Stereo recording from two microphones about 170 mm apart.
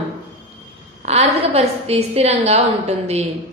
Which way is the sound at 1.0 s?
40° right (ahead or behind).